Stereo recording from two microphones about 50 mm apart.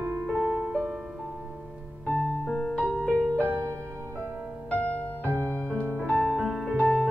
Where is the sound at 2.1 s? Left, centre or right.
Centre.